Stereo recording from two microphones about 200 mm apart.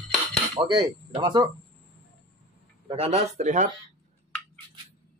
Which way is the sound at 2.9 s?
30° right (ahead or behind).